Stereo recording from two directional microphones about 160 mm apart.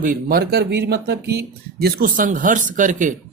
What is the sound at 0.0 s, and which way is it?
Speech, 65° right (ahead or behind).